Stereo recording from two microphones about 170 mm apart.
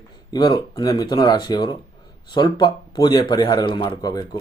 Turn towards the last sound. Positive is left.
turn(degrees=20)  # may be behind; listen again after turning